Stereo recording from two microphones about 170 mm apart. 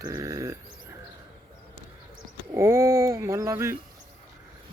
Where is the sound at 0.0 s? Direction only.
20° right (ahead or behind).